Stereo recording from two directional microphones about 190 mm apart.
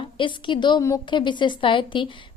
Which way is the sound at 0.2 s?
25° left (ahead or behind).